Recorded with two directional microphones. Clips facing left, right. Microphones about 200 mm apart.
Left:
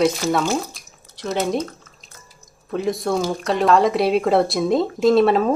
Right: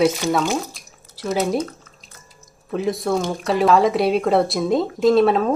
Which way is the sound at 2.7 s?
Centre (ahead or behind).